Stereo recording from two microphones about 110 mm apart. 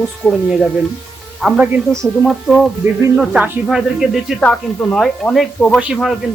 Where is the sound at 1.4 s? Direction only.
10° right (ahead or behind).